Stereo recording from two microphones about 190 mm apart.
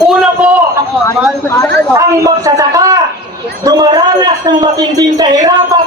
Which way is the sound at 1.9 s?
15° right (ahead or behind).